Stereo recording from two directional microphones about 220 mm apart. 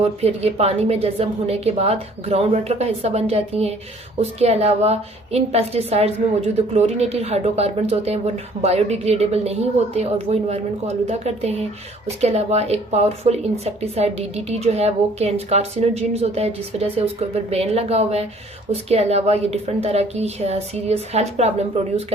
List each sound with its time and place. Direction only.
0.0 s speech: 25° right (ahead or behind)